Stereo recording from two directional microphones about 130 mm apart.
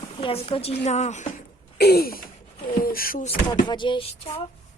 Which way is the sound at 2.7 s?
90° left.